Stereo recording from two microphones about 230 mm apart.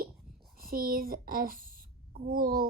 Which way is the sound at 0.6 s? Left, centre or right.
Right.